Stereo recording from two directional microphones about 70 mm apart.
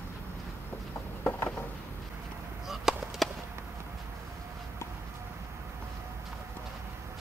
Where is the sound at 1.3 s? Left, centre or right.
Left.